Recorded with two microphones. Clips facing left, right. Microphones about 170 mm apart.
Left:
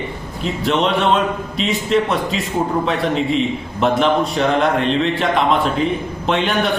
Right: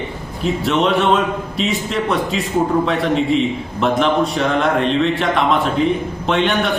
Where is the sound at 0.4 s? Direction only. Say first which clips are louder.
Right 1 dB; centre (ahead or behind).